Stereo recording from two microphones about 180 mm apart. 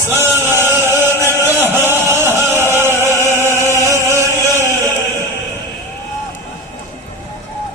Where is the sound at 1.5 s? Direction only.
10° right (ahead or behind).